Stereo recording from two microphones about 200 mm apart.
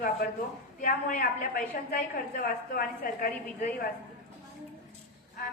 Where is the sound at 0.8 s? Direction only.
40° left (ahead or behind).